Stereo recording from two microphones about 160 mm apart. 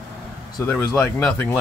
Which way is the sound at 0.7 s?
15° left (ahead or behind).